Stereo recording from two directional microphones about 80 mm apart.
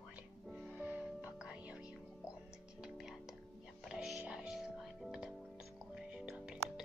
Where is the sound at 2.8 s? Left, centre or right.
Centre.